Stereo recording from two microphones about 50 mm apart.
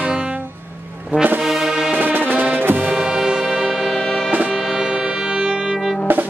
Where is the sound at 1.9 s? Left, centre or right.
Right.